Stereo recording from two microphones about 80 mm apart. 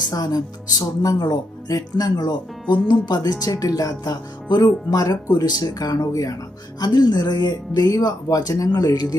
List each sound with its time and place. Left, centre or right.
0.1 s speech: left
3.5 s speech: left
6.7 s speech: left